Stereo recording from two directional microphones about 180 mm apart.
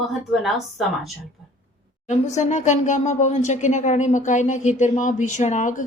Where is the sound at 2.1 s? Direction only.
40° left (ahead or behind).